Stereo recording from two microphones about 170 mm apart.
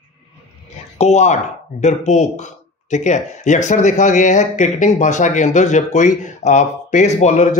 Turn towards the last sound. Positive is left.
turn(degrees=45)  # may be behind; listen again after turning